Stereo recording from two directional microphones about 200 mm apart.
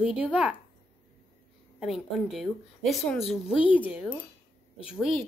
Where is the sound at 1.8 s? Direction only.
Centre (ahead or behind).